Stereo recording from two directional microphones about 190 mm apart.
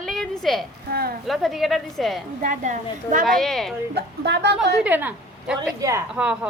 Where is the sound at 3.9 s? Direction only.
60° right (ahead or behind).